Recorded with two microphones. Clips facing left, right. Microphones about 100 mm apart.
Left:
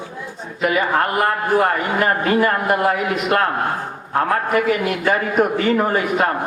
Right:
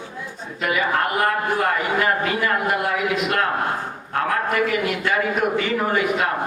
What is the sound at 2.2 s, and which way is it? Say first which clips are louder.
A man's voice: left 5 dB; 40° left (ahead or behind).